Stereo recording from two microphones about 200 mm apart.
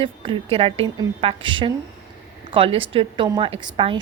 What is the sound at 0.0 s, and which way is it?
Speech, 25° right (ahead or behind).